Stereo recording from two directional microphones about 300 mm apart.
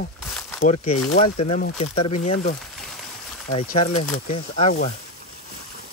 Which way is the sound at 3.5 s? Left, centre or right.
Centre.